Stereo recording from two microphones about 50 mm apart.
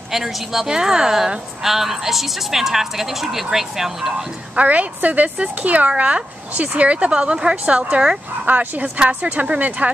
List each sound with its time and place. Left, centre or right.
0.1 s a woman's voice: centre
4.6 s speech: right
8.5 s speech: right